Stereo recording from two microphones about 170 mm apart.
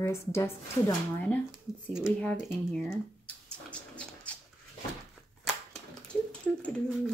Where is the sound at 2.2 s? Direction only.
5° left (ahead or behind).